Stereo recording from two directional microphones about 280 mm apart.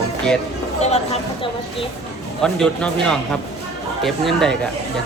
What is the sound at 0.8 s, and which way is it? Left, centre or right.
Speech, left.